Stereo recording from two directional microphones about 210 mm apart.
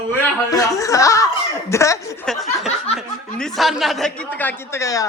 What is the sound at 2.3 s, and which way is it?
Speech, centre (ahead or behind).